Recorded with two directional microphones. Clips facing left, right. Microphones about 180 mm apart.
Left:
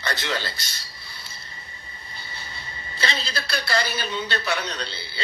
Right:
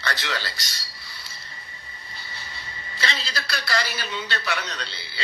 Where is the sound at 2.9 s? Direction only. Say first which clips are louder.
Left 2 dB; 30° left (ahead or behind).